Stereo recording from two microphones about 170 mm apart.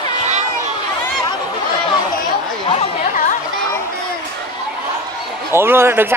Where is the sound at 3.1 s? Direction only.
50° left (ahead or behind).